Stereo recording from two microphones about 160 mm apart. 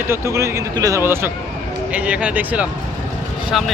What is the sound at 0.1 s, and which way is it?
Speech, 15° right (ahead or behind).